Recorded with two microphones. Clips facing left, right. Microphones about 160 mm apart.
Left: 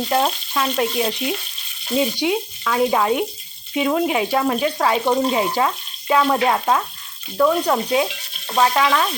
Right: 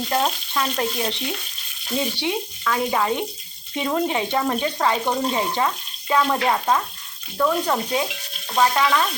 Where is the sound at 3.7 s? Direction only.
5° left (ahead or behind).